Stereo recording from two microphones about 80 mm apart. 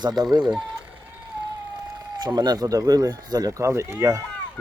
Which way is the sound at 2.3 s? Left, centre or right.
Right.